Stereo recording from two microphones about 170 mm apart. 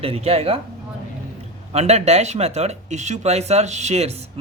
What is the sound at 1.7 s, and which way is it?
Speech, 40° right (ahead or behind).